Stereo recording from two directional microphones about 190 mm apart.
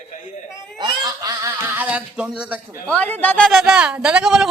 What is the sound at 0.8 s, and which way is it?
Honk, 20° right (ahead or behind).